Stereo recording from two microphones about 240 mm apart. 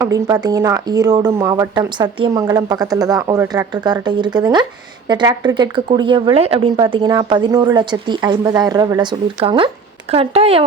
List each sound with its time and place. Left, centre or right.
0.0 s speech: centre